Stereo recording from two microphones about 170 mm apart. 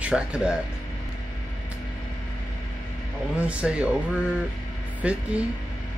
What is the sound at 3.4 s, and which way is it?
Speech, 5° right (ahead or behind).